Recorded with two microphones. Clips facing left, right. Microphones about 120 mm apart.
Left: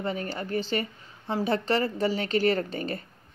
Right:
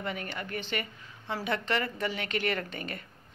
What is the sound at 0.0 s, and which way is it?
A woman's voice, 35° left (ahead or behind).